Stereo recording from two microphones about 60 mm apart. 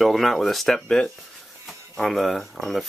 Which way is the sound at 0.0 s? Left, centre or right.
Centre.